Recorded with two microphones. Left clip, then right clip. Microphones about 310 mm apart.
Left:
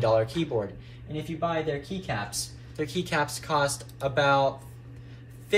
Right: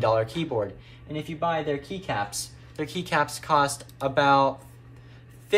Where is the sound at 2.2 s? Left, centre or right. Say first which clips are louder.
Even; centre.